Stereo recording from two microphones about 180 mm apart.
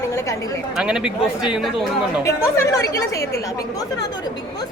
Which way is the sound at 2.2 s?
15° left (ahead or behind).